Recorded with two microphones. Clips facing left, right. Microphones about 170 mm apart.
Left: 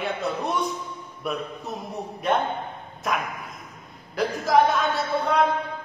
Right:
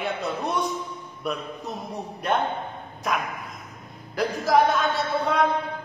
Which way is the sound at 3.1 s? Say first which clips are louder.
Even; centre (ahead or behind).